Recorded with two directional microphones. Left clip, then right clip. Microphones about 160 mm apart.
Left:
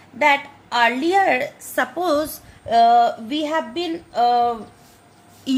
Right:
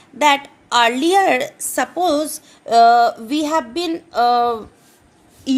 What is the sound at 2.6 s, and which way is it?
Speech, 55° right (ahead or behind).